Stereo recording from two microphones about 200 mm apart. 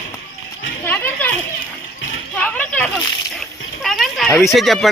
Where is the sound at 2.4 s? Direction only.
5° left (ahead or behind).